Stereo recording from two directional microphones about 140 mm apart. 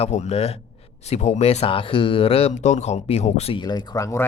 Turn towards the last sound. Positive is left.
turn(degrees=25)  # may be behind; listen again after turning